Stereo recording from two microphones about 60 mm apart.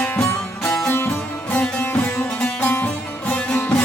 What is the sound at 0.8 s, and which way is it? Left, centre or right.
Music, left.